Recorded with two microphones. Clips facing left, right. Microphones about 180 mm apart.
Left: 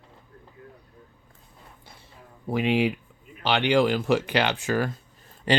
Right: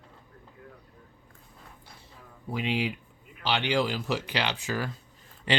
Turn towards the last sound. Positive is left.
turn(degrees=40)  # may be behind; listen again after turning